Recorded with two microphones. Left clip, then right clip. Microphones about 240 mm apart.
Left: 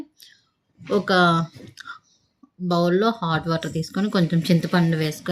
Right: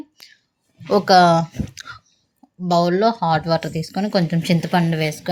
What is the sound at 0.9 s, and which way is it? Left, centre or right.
Speech, centre.